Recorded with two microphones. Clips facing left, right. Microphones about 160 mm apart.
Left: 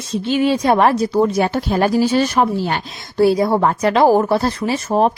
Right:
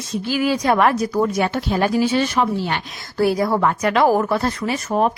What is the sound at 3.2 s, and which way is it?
Speech, 25° left (ahead or behind).